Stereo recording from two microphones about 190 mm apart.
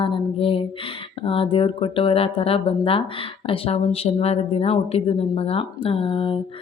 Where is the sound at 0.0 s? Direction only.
30° left (ahead or behind).